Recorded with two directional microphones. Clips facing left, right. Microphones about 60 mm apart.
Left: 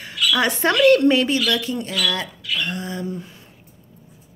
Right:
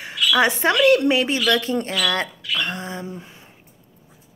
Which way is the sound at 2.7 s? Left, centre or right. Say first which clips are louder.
Left 2 dB; right.